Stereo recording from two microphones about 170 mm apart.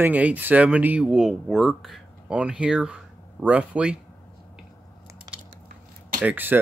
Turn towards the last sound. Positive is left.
turn(degrees=-10)  # may be behind; listen again after turning